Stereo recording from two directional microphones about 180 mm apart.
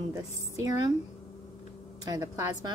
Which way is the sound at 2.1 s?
20° right (ahead or behind).